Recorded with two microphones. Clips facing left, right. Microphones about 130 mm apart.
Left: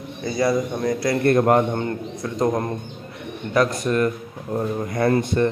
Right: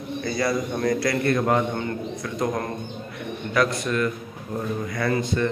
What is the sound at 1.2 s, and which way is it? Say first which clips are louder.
Speech: left 7 dB; 50° left (ahead or behind).